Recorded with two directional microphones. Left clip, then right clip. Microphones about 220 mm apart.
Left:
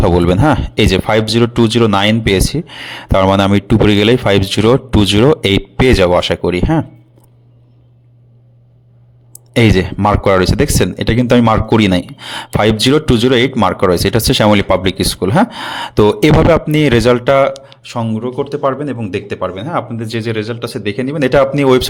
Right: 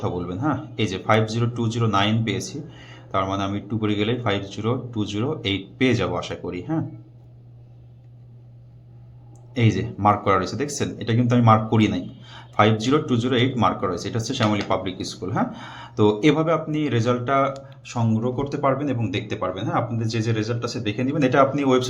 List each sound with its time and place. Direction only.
0.0 s speech: 50° left (ahead or behind)
9.6 s speech: 50° left (ahead or behind)